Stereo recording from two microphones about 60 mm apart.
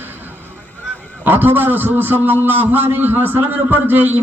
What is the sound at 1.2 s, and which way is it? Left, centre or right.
A man's voice, right.